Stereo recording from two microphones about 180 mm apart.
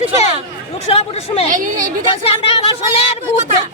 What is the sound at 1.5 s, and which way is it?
Speech, 45° right (ahead or behind).